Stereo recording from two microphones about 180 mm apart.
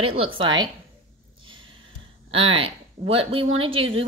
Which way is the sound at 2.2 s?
30° right (ahead or behind).